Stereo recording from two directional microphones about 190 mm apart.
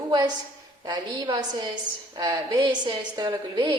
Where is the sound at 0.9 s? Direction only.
20° right (ahead or behind).